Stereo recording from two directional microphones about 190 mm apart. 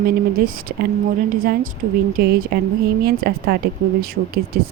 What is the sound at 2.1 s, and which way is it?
Speech, 50° right (ahead or behind).